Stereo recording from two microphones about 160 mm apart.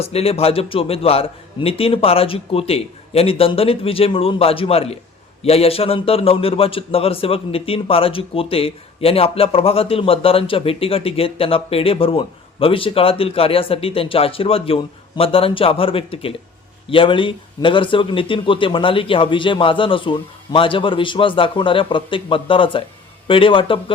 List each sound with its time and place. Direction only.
0.0 s a man's voice: 40° left (ahead or behind)